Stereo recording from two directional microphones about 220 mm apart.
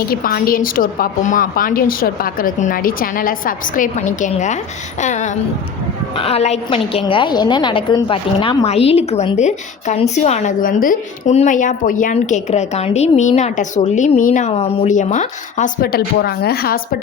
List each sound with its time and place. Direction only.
0.1 s a woman's voice: 40° left (ahead or behind)